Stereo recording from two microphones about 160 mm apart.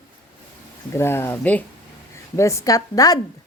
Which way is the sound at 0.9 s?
15° left (ahead or behind).